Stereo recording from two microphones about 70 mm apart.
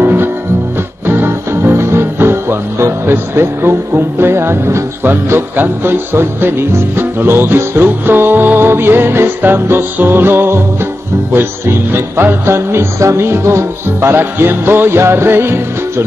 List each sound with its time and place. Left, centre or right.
0.0 s music: right
5.0 s music: right